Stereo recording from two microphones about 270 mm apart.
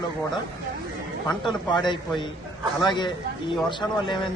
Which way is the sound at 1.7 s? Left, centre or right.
Centre.